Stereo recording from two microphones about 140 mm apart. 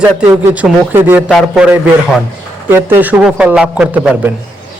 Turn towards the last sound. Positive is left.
turn(degrees=-10)  # may be behind; listen again after turning